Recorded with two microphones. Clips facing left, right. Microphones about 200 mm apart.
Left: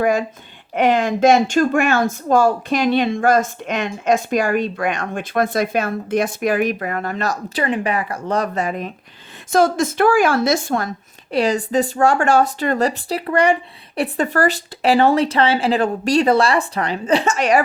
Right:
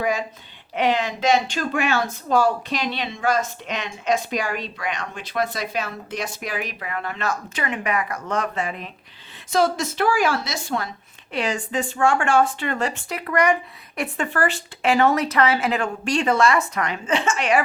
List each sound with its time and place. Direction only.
0.0 s speech: 50° left (ahead or behind)